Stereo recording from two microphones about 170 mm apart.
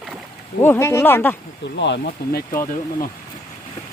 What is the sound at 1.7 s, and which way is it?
Speech, 90° left.